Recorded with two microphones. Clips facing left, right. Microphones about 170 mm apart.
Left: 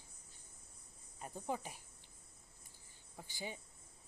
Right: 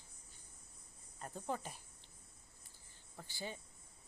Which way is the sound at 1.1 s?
10° left (ahead or behind).